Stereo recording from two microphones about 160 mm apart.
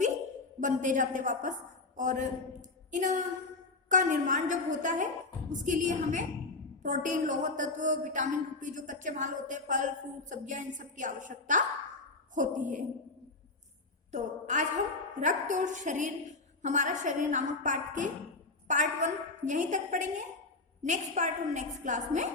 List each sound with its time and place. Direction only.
0.6 s a man's voice: 55° right (ahead or behind)
14.1 s speech: 50° right (ahead or behind)